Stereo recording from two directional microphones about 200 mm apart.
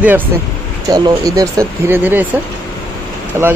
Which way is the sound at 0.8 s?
20° right (ahead or behind).